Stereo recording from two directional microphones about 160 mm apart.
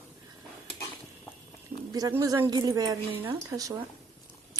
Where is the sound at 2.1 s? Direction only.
15° right (ahead or behind).